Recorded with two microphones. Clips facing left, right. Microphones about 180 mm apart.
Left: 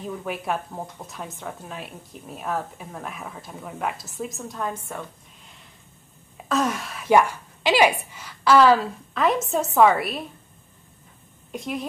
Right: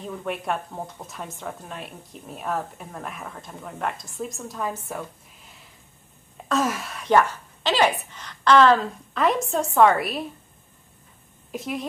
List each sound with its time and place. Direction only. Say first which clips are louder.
0.0 s a woman's voice: even; centre (ahead or behind)
6.3 s a woman's voice: even; centre (ahead or behind)
11.5 s a woman's voice: even; centre (ahead or behind)